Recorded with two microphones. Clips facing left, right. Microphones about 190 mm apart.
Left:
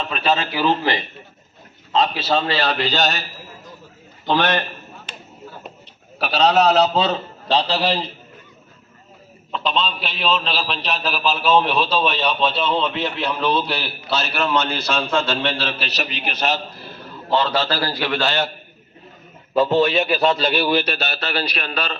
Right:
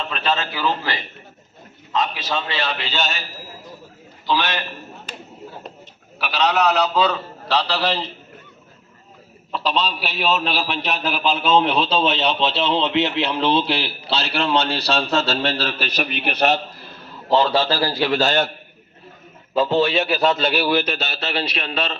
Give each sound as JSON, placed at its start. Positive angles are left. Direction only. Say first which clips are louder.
{"t": 0.1, "sound": "a man's voice", "louder": "left 4 dB", "side_deg": 10}
{"t": 1.9, "sound": "a man's voice", "louder": "left 4 dB", "side_deg": 30}
{"t": 4.3, "sound": "a man's voice", "louder": "left 3 dB", "side_deg": 55}
{"t": 6.1, "sound": "a man's voice", "louder": "left 4 dB", "side_deg": 35}
{"t": 9.5, "sound": "a man's voice", "louder": "even", "side_deg": -5}
{"t": 17.6, "sound": "a man's voice", "louder": "right 2 dB", "side_deg": -10}
{"t": 17.9, "sound": "a man's voice", "louder": "right 3 dB", "side_deg": -30}
{"t": 18.2, "sound": "a man's voice", "louder": "right 2 dB", "side_deg": -45}
{"t": 19.8, "sound": "a man's voice", "louder": "left 1 dB", "side_deg": -5}
{"t": 21.2, "sound": "a man's voice", "louder": "even", "side_deg": -25}